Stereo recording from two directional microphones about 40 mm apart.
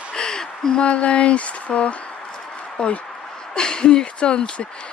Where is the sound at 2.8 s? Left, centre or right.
Left.